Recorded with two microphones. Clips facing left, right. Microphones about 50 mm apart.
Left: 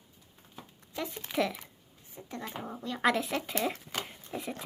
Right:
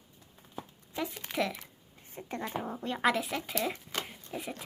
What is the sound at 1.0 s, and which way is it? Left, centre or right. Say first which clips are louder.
Speech: left 1 dB; centre.